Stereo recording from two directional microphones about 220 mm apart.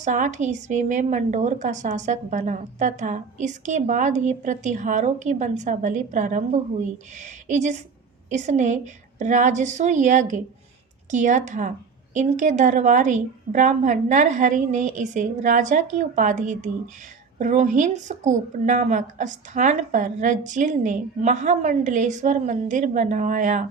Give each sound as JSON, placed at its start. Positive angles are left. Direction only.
{"t": 0.0, "sound": "a woman's voice", "side_deg": -35}